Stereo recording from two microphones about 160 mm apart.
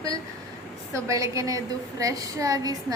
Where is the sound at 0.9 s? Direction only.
20° right (ahead or behind).